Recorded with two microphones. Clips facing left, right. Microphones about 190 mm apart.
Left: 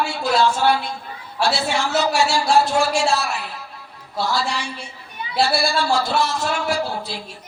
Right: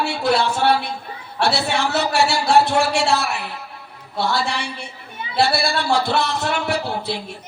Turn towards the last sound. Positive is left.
turn(degrees=-65)  # may be behind; listen again after turning